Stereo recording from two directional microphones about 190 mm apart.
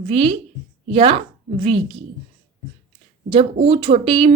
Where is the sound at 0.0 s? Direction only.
30° right (ahead or behind).